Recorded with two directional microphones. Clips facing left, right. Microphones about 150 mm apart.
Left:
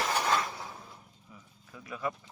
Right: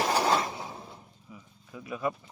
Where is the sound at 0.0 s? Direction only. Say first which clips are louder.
Right 4 dB; 35° right (ahead or behind).